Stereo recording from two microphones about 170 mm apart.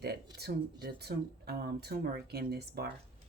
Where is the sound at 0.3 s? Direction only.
70° right (ahead or behind).